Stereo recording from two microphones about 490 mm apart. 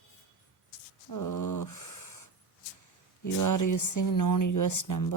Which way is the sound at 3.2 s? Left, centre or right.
Left.